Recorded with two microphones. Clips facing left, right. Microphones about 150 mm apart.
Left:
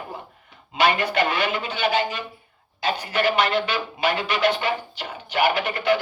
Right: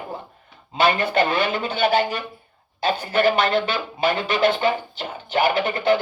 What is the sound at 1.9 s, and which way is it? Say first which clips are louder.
Speech: right 2 dB; 60° right (ahead or behind).